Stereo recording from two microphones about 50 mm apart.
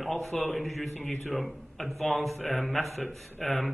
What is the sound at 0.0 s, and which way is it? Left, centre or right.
A man's voice, centre.